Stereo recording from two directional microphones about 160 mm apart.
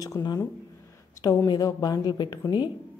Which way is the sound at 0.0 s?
25° left (ahead or behind).